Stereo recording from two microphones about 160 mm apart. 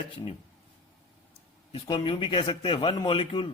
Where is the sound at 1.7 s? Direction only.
30° left (ahead or behind).